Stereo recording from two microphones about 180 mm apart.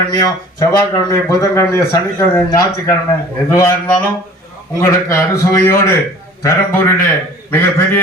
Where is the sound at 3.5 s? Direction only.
15° left (ahead or behind).